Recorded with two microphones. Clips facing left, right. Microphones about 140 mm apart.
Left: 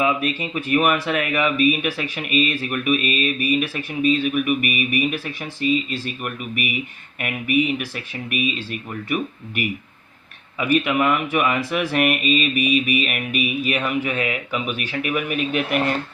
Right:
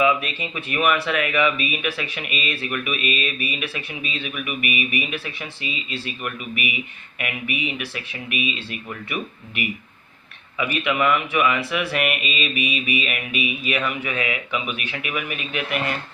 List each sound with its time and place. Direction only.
0.0 s speech: 45° left (ahead or behind)
10.6 s speech: 45° left (ahead or behind)